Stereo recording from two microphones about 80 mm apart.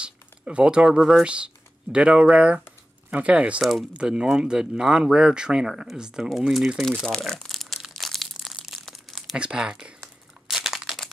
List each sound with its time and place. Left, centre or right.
0.0 s a sound: centre
1.2 s speech: centre
6.9 s crumpling: centre
9.4 s speech: centre
10.5 s crumpling: centre